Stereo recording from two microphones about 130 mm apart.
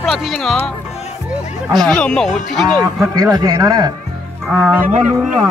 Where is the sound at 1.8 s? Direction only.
5° left (ahead or behind).